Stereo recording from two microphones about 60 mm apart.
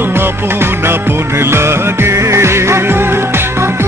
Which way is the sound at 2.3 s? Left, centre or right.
Right.